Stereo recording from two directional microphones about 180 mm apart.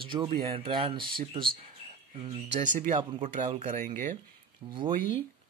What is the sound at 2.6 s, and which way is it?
Speech, 45° right (ahead or behind).